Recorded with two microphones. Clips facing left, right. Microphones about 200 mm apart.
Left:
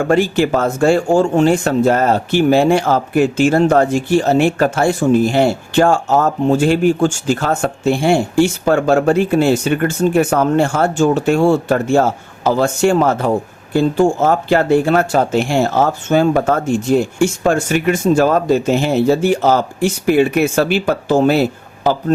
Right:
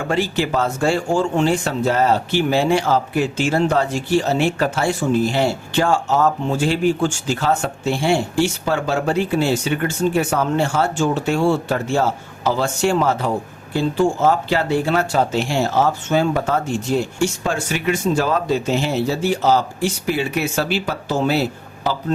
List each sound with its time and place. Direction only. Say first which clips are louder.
0.0 s speech: left 7 dB; 50° left (ahead or behind)